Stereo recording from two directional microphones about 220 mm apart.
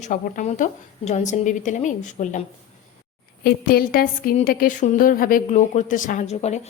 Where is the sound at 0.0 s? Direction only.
35° left (ahead or behind).